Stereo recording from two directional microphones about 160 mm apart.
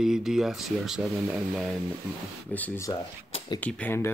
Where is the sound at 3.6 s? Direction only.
10° left (ahead or behind).